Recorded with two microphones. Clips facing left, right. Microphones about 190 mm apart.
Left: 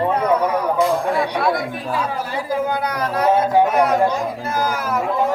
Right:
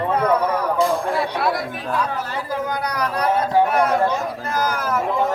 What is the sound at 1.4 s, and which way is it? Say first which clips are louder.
Speech: left 2 dB; centre (ahead or behind).